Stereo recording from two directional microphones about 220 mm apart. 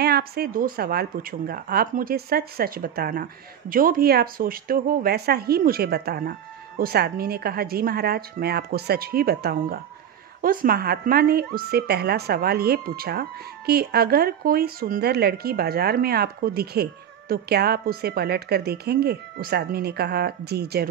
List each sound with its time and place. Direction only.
0.0 s a woman's voice: 45° right (ahead or behind)